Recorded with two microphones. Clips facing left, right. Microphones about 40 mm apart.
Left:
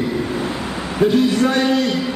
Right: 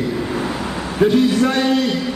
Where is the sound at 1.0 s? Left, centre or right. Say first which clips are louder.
Even; centre.